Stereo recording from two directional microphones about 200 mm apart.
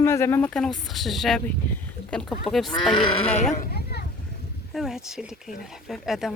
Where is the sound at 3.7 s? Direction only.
50° left (ahead or behind).